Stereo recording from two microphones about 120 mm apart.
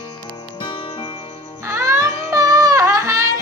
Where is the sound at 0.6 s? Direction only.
40° left (ahead or behind).